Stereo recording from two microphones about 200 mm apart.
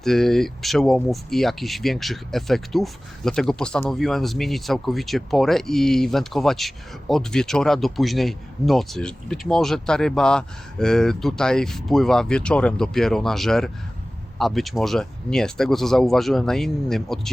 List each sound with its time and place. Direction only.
0.0 s speech: centre (ahead or behind)